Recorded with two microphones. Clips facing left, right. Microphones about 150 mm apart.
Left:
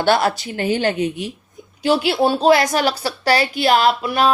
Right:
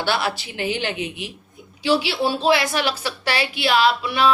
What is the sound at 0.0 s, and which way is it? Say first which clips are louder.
Speech: left 6 dB; 45° left (ahead or behind).